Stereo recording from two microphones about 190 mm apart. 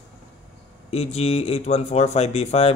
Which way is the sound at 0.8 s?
35° left (ahead or behind).